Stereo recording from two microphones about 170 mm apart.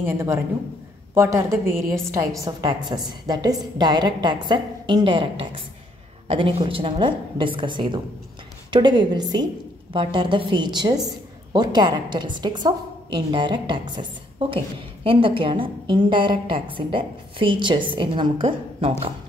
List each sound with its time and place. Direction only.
0.0 s a woman's voice: 15° right (ahead or behind)
15.0 s a woman's voice: 30° right (ahead or behind)